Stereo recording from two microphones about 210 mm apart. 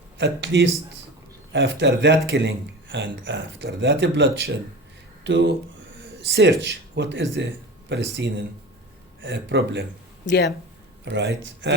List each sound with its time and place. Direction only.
0.2 s speech: 55° right (ahead or behind)
10.2 s speech: 50° left (ahead or behind)
11.0 s speech: 55° right (ahead or behind)